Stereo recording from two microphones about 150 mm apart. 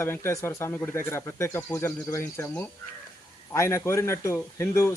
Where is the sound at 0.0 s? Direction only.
15° left (ahead or behind).